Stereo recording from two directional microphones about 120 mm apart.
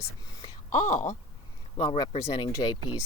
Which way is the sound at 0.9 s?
90° left.